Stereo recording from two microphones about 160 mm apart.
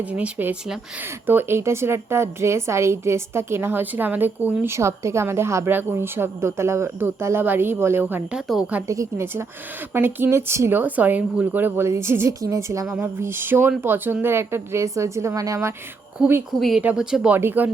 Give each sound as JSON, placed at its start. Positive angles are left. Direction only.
{"t": 0.0, "sound": "a woman's voice", "side_deg": -10}
{"t": 8.4, "sound": "a woman's voice", "side_deg": 0}
{"t": 8.9, "sound": "a woman's voice", "side_deg": -20}
{"t": 16.6, "sound": "a woman's voice", "side_deg": 0}